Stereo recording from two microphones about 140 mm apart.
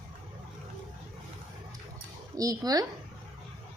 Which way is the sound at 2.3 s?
25° right (ahead or behind).